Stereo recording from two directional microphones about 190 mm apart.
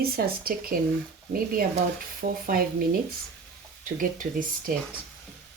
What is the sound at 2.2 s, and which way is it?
Speech, 50° right (ahead or behind).